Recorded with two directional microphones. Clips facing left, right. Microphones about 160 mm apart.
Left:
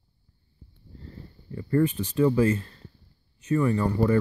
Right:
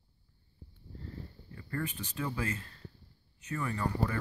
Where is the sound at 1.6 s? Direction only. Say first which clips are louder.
Left 14 dB; 30° left (ahead or behind).